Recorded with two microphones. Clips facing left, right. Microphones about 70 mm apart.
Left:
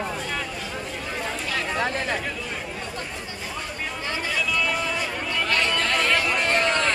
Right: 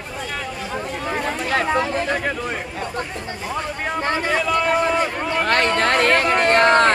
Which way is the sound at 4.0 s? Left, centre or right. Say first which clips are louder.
Right 7 dB; right.